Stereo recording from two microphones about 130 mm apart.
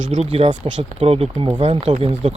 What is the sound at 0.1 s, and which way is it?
Speech, 60° right (ahead or behind).